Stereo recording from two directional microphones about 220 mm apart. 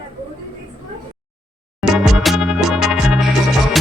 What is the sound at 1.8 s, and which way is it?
Music, centre (ahead or behind).